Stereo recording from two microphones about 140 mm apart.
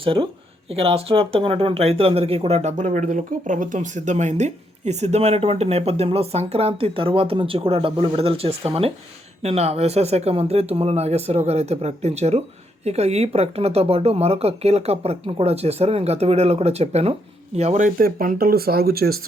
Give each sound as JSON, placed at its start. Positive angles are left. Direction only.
{"t": 0.0, "sound": "speech", "side_deg": -40}